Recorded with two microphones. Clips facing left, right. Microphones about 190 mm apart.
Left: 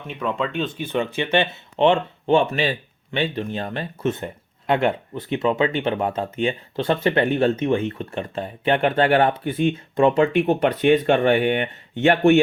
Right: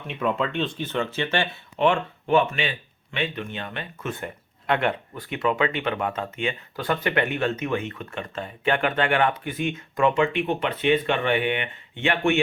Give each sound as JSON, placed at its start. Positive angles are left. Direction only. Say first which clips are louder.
{"t": 0.1, "sound": "speech", "louder": "even", "side_deg": 0}
{"t": 0.9, "sound": "speech", "louder": "left 4 dB", "side_deg": 15}
{"t": 4.1, "sound": "speech", "louder": "left 3 dB", "side_deg": 25}
{"t": 10.3, "sound": "speech", "louder": "left 7 dB", "side_deg": 45}